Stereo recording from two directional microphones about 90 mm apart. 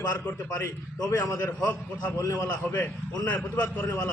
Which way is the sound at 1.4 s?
25° left (ahead or behind).